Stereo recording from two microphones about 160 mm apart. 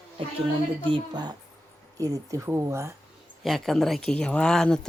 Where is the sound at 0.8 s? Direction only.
30° right (ahead or behind).